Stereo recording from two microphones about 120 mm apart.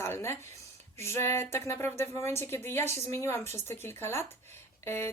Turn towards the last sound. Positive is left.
turn(degrees=20)  # may be behind; listen again after turning